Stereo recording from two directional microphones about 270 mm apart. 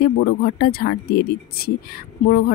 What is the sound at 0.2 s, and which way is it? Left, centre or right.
Speech, left.